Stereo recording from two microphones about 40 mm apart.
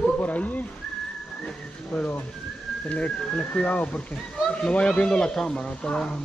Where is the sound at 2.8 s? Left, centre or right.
Left.